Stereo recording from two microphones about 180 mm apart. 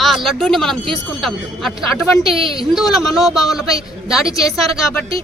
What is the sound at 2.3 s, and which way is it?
Speech, 30° right (ahead or behind).